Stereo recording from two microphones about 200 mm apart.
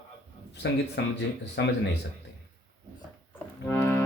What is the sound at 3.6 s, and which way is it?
Music, 10° left (ahead or behind).